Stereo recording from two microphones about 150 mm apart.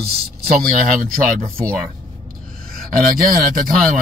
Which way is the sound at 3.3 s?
65° right (ahead or behind).